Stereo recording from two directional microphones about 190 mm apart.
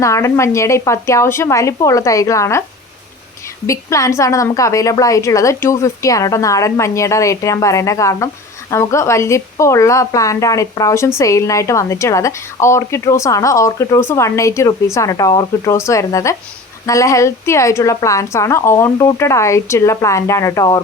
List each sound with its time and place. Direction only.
0.0 s a woman's voice: 15° left (ahead or behind)
3.7 s a woman's voice: 15° left (ahead or behind)